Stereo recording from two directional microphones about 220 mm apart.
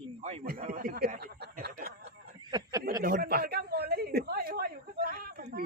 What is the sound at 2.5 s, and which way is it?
Speech, 15° right (ahead or behind).